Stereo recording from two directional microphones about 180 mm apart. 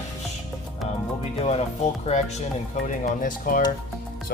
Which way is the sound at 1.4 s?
35° left (ahead or behind).